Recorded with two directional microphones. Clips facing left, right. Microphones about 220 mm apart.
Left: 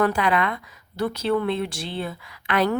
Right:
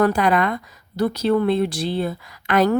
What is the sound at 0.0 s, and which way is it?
Speech, 40° right (ahead or behind).